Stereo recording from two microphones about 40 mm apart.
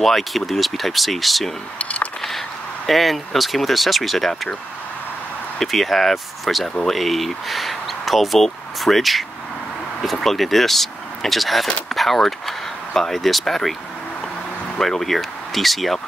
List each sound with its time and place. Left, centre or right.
0.0 s speech: centre
1.8 s speech: left
2.9 s speech: centre
5.6 s speech: centre
10.2 s speech: centre
14.8 s speech: centre